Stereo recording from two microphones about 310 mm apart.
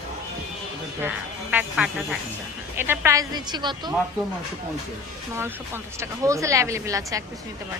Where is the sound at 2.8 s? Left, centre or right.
Centre.